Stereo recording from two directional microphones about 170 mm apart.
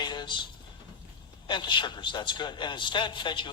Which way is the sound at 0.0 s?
25° left (ahead or behind).